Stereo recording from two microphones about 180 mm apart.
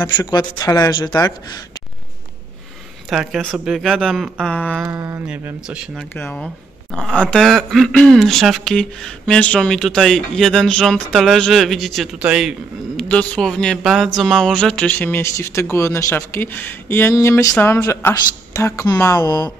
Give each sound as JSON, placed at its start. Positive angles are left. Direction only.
{"t": 0.0, "sound": "speech", "side_deg": 20}
{"t": 3.1, "sound": "speech", "side_deg": 0}
{"t": 4.8, "sound": "speech", "side_deg": -15}
{"t": 6.1, "sound": "speech", "side_deg": 5}